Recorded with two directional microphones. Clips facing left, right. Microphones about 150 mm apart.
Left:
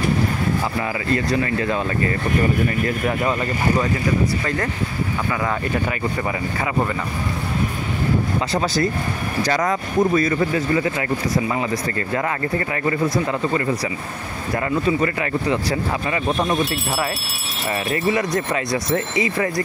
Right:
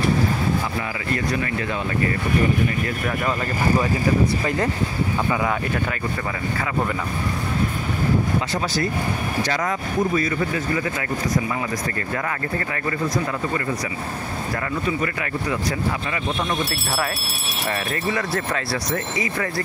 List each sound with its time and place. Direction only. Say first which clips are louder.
9.5 s speech: left 3 dB; 40° left (ahead or behind)
16.1 s speech: left 4 dB; 30° left (ahead or behind)
17.9 s speech: left 7 dB; 15° left (ahead or behind)